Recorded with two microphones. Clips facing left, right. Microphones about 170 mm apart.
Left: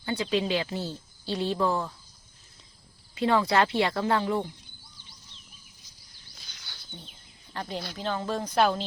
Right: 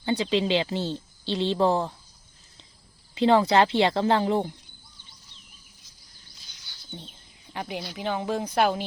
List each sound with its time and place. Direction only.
0.0 s speech: 25° right (ahead or behind)
3.2 s speech: 25° right (ahead or behind)
6.5 s bird: 65° left (ahead or behind)
7.5 s speech: 15° right (ahead or behind)